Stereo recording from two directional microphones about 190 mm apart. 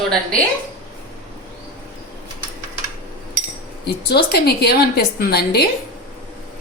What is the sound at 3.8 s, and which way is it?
A woman's voice, 60° left (ahead or behind).